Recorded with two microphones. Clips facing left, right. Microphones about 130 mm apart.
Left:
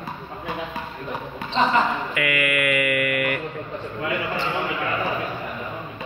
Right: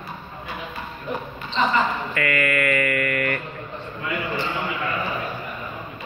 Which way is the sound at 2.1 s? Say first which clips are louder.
Right 3 dB; 10° left (ahead or behind).